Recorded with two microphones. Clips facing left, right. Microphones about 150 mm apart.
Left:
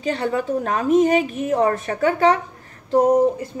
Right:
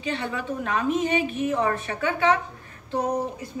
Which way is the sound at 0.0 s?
40° left (ahead or behind).